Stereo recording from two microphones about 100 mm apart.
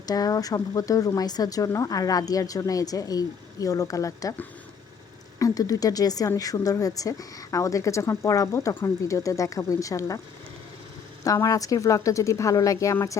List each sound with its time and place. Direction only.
0.0 s speech: 40° left (ahead or behind)
5.4 s speech: 35° left (ahead or behind)
11.2 s speech: 35° left (ahead or behind)